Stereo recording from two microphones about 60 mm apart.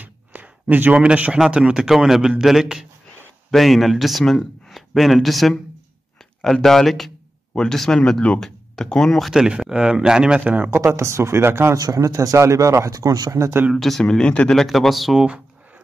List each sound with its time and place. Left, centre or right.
0.0 s a sound: right
0.9 s a man's voice: right; by 9.3 s centre
9.3 s a man's voice: centre
11.0 s speech: right
11.7 s speech: right
13.4 s speech: right
13.7 s speech: centre
14.0 s speech: centre
14.5 s speech: centre
15.1 s a man's voice: centre